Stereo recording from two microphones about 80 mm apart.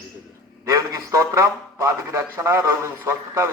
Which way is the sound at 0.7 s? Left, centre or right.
Right.